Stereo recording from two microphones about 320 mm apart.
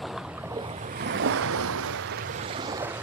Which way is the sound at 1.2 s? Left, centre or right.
Right.